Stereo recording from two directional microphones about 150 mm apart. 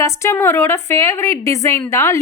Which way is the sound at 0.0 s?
20° left (ahead or behind).